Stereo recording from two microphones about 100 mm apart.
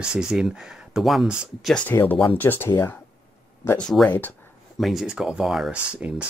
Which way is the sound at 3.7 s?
10° left (ahead or behind).